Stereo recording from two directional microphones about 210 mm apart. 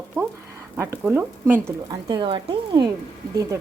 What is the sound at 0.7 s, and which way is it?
Speech, 10° right (ahead or behind).